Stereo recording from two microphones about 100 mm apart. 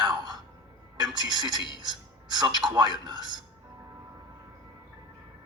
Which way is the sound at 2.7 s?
45° right (ahead or behind).